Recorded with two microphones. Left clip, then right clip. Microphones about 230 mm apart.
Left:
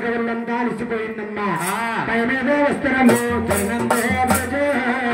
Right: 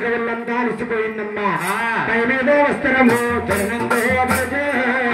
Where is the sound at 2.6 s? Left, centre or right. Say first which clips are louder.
Right 2 dB; centre.